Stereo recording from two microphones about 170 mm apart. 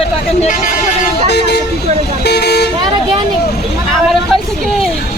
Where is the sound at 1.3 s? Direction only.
75° left (ahead or behind).